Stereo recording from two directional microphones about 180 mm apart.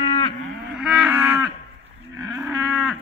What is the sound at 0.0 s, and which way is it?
Cattle, 25° left (ahead or behind).